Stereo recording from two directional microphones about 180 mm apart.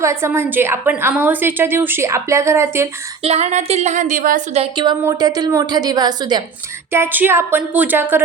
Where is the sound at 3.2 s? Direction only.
35° right (ahead or behind).